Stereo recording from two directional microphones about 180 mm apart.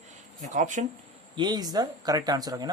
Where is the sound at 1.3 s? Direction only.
25° right (ahead or behind).